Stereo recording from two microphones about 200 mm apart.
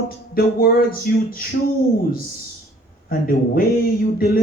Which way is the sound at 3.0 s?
45° left (ahead or behind).